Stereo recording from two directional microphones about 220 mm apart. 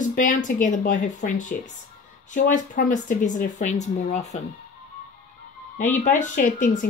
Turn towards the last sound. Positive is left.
turn(degrees=35)  # may be behind; listen again after turning